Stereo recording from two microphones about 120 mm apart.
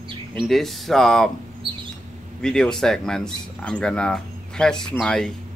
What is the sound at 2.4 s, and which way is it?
Speech, 5° left (ahead or behind).